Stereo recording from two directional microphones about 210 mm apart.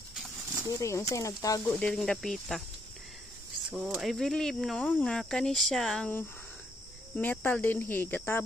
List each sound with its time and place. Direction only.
0.7 s speech: 15° left (ahead or behind)
1.7 s speech: 5° left (ahead or behind)
3.7 s speech: centre (ahead or behind)